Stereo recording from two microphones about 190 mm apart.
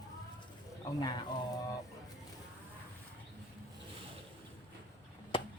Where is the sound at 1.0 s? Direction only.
20° left (ahead or behind).